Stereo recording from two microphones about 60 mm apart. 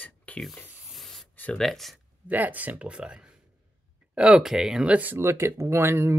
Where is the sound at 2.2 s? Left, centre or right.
Right.